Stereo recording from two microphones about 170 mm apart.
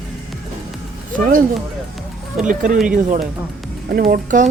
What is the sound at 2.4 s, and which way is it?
Speech, 50° right (ahead or behind).